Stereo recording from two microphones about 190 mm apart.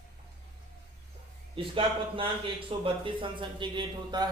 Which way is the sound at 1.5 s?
25° right (ahead or behind).